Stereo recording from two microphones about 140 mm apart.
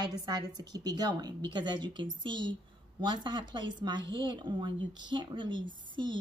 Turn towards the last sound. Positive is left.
turn(degrees=-35)  # may be behind; listen again after turning